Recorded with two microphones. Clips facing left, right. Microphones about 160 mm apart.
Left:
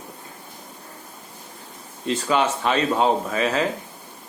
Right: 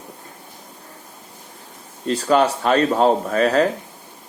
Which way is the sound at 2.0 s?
40° right (ahead or behind).